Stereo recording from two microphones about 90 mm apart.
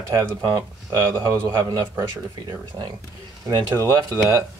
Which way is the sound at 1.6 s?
40° right (ahead or behind).